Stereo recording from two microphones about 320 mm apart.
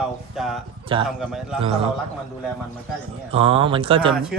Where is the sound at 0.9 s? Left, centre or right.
Centre.